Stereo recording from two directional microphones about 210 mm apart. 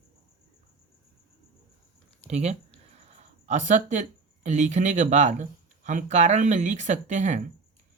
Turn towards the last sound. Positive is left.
turn(degrees=-35)  # may be behind; listen again after turning